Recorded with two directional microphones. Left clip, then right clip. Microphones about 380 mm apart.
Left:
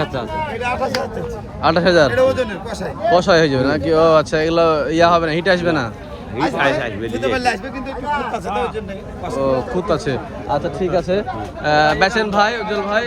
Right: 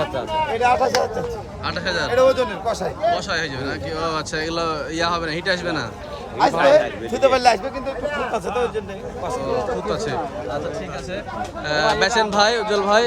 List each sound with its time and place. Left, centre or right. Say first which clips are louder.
0.0 s a sound: left 1 dB; centre
0.6 s speech: right 4 dB; centre
1.6 s speech: left 11 dB; centre
2.1 s speech: left 1 dB; centre
3.1 s speech: left 12 dB; centre
6.4 s speech: right 3 dB; centre
9.2 s speech: left 4 dB; centre
11.6 s speech: left 5 dB; centre